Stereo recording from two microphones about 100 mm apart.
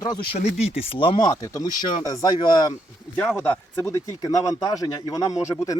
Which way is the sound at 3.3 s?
20° left (ahead or behind).